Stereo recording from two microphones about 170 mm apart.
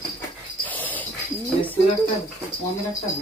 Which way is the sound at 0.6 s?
10° left (ahead or behind).